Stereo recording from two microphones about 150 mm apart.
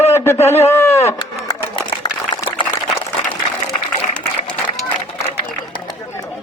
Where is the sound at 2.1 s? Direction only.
30° left (ahead or behind).